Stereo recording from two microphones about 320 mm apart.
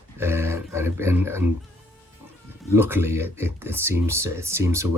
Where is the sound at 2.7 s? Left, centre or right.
Centre.